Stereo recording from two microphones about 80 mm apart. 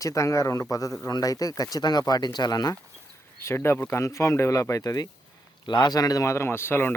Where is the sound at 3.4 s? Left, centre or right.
Left.